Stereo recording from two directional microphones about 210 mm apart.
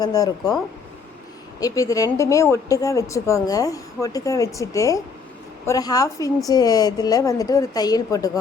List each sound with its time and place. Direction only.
0.0 s a woman's voice: 20° left (ahead or behind)
1.6 s a woman's voice: 15° left (ahead or behind)